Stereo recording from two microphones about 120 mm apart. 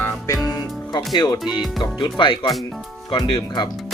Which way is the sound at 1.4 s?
Centre (ahead or behind).